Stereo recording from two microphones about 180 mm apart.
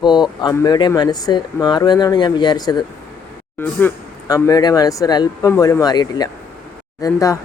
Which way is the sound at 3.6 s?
10° left (ahead or behind).